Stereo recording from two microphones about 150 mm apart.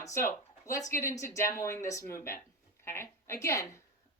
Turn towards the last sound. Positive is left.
turn(degrees=20)  # may be behind; listen again after turning